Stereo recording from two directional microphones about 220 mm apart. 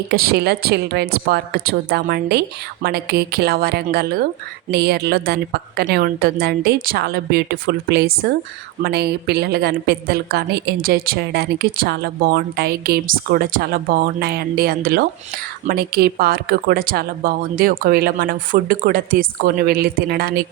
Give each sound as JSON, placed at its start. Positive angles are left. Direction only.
{"t": 0.1, "sound": "a woman's voice", "side_deg": -45}